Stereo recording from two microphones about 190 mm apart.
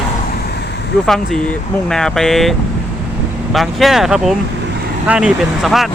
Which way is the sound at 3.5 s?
Centre (ahead or behind).